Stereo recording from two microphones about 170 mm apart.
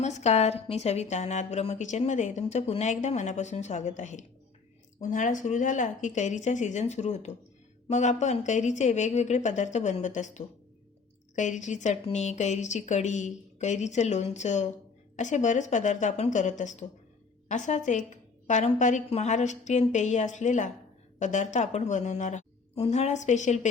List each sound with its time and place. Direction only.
0.0 s a woman's voice: 40° left (ahead or behind)